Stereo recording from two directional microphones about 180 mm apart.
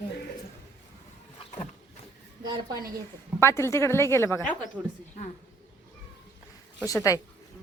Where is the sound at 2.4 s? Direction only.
25° right (ahead or behind).